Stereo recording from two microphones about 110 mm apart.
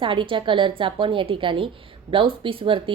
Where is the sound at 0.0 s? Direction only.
50° right (ahead or behind).